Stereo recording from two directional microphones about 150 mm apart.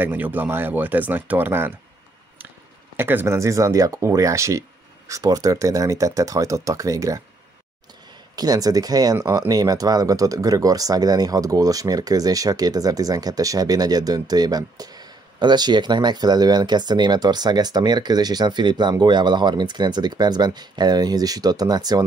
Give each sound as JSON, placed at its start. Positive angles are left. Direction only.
{"t": 0.0, "sound": "speech", "side_deg": -10}
{"t": 3.0, "sound": "speech", "side_deg": -15}
{"t": 8.4, "sound": "speech", "side_deg": -25}